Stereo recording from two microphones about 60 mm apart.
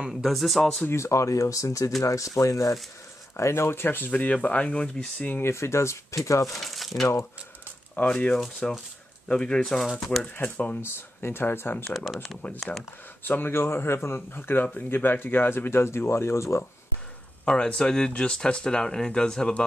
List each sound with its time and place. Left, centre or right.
0.1 s speech: centre
0.8 s speech: left
3.3 s speech: left; by 4.9 s centre
5.4 s speech: left
6.6 s speech: centre
8.1 s speech: centre
9.9 s speech: centre
10.4 s speech: left
10.8 s speech: left
11.8 s speech: centre
13.2 s speech: left
17.7 s speech: centre